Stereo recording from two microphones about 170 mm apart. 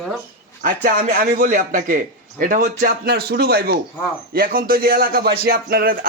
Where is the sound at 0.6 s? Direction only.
50° right (ahead or behind).